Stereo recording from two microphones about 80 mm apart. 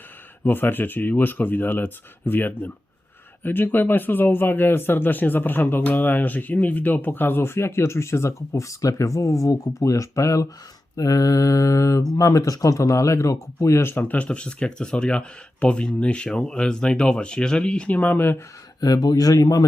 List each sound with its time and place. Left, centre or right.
0.4 s speech: left
10.9 s mantra: left
12.1 s speech: left
18.8 s mantra: left